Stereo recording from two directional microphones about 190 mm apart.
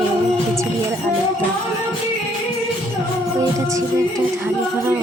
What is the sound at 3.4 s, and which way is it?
Speech, 15° right (ahead or behind).